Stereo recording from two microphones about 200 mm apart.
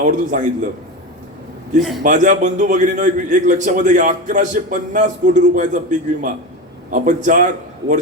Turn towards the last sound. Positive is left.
turn(degrees=-40)  # may be behind; listen again after turning